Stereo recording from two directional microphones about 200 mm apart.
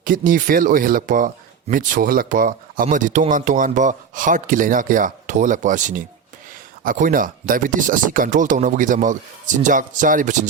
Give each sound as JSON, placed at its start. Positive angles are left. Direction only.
{"t": 0.0, "sound": "speech", "side_deg": -40}